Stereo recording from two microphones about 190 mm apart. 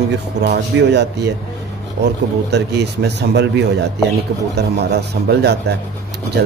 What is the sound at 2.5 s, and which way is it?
Speech, 60° right (ahead or behind).